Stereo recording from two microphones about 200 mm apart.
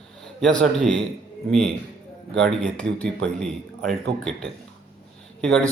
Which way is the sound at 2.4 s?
5° left (ahead or behind).